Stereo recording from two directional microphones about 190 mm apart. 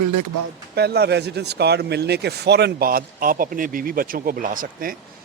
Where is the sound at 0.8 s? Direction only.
60° right (ahead or behind).